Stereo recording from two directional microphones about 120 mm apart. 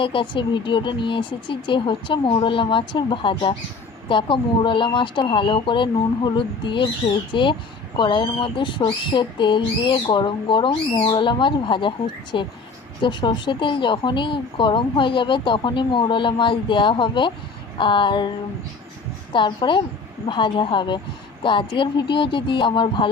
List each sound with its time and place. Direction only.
0.0 s speech: 45° left (ahead or behind)